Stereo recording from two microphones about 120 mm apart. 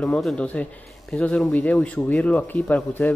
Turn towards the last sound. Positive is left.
turn(degrees=15)  # may be behind; listen again after turning